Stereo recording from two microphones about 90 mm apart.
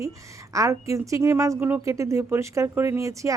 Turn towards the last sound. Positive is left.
turn(degrees=-35)  # may be behind; listen again after turning